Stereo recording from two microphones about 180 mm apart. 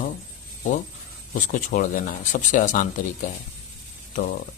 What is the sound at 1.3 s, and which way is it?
Speech, 45° left (ahead or behind).